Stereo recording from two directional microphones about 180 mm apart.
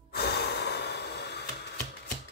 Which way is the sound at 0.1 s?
60° left (ahead or behind).